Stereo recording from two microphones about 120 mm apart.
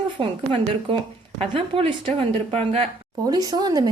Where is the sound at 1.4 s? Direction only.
50° right (ahead or behind).